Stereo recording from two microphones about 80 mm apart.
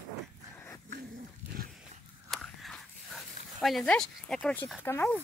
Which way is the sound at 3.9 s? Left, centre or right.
Centre.